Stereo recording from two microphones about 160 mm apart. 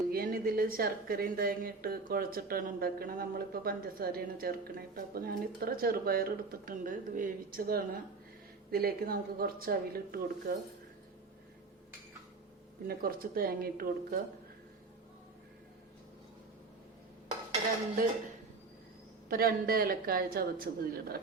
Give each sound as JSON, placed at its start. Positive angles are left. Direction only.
{"t": 0.1, "sound": "a woman's voice", "side_deg": -65}
{"t": 12.9, "sound": "speech", "side_deg": -65}
{"t": 19.3, "sound": "a woman's voice", "side_deg": -65}